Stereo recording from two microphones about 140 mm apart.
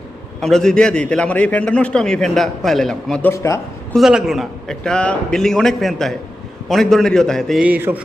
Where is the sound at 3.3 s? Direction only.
20° left (ahead or behind).